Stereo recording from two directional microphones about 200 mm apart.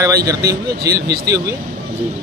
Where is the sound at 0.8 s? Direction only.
50° right (ahead or behind).